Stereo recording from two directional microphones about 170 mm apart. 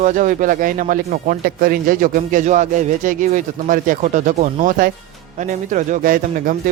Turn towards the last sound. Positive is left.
turn(degrees=-55)  # may be behind; listen again after turning